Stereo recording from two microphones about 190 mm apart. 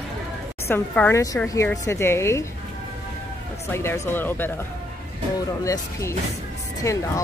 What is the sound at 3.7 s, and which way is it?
Speech, 15° left (ahead or behind).